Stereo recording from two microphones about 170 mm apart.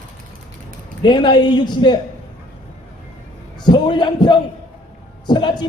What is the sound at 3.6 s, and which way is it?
Speech, 25° left (ahead or behind).